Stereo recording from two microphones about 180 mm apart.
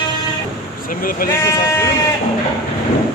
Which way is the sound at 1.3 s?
15° left (ahead or behind).